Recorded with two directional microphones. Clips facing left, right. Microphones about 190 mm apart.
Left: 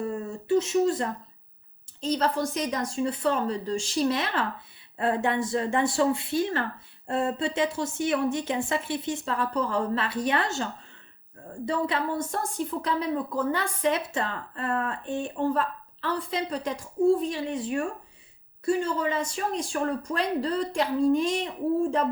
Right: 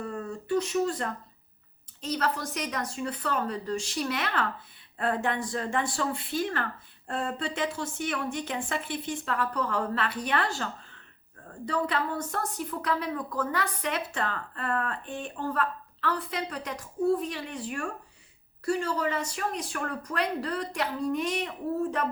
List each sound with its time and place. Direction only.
0.0 s a woman's voice: 25° left (ahead or behind)